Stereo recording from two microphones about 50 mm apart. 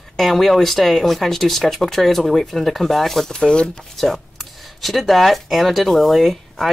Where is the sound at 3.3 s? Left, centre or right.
Centre.